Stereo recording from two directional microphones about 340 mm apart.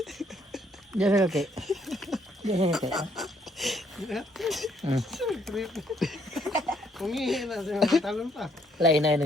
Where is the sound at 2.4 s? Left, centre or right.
Centre.